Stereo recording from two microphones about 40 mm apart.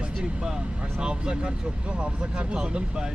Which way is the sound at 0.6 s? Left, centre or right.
Right.